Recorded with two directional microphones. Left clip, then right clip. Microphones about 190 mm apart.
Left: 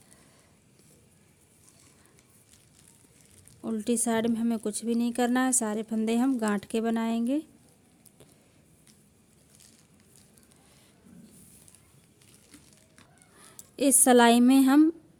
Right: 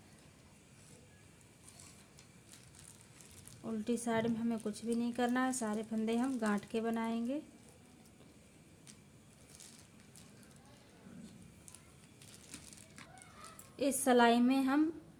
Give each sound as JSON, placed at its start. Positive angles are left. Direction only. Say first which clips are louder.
{"t": 3.6, "sound": "speech", "louder": "left 9 dB", "side_deg": 70}
{"t": 13.7, "sound": "speech", "louder": "left 9 dB", "side_deg": 70}